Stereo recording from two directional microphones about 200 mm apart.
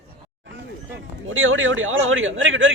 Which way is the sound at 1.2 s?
80° right.